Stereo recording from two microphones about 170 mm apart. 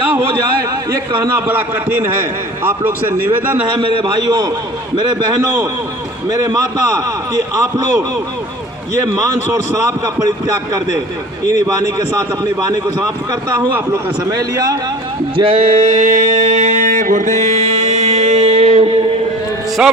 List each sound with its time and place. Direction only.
0.9 s a man's voice: 20° right (ahead or behind)
3.8 s a man's voice: 30° right (ahead or behind)
6.2 s a man's voice: 20° right (ahead or behind)
14.3 s a man's voice: 20° right (ahead or behind)
15.4 s speech: 35° right (ahead or behind)
16.0 s music: 45° right (ahead or behind)
19.8 s speech: 5° right (ahead or behind)